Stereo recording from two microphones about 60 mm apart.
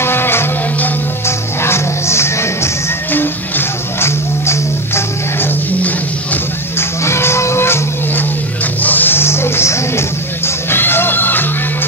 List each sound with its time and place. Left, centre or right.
0.0 s music: left
3.1 s music: left
4.5 s music: left
6.8 s music: left
8.8 s a sound: left